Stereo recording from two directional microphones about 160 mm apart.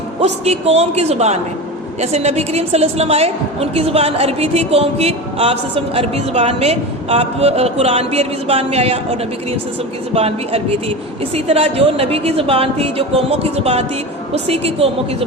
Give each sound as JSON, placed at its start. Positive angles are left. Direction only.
{"t": 0.2, "sound": "a woman's voice", "side_deg": -40}
{"t": 10.2, "sound": "a woman's voice", "side_deg": -40}